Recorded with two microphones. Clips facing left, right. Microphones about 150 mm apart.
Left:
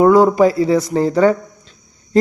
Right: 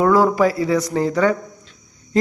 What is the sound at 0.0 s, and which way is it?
A man's voice, 25° left (ahead or behind).